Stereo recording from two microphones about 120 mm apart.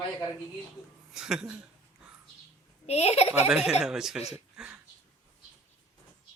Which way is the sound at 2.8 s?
60° left (ahead or behind).